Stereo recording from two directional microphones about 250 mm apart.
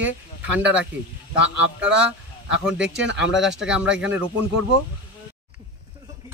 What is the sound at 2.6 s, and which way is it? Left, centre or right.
Speech, centre.